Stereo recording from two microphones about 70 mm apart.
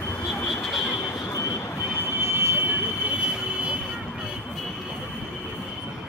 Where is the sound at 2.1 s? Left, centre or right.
Right.